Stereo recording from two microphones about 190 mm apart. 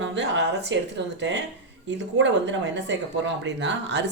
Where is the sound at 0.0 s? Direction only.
70° right (ahead or behind).